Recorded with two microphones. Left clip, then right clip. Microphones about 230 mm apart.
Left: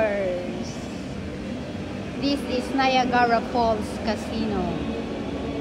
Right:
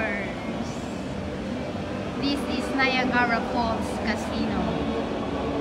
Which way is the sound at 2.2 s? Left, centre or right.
Centre.